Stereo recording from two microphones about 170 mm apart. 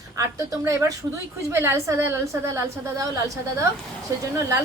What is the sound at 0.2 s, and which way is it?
A woman's voice, 15° right (ahead or behind).